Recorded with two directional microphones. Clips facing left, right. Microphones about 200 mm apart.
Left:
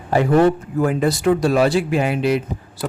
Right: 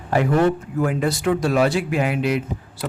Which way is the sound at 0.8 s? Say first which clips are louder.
Left 4 dB; 35° left (ahead or behind).